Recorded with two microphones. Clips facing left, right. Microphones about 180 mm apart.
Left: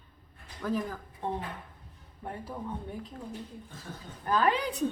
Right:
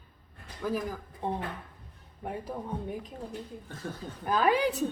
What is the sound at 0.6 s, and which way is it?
A woman's voice, 10° right (ahead or behind).